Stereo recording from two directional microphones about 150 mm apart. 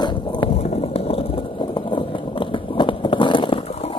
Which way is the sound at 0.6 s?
40° left (ahead or behind).